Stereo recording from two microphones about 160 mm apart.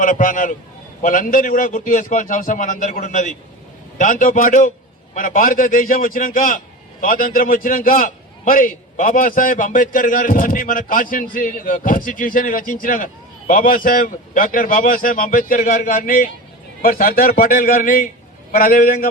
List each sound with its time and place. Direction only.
0.0 s a man's voice: 60° left (ahead or behind)